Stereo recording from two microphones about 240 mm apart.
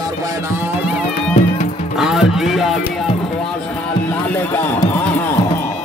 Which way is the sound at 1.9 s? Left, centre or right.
Centre.